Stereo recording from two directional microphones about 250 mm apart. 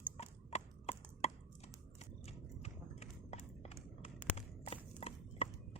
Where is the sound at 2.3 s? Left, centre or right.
Left.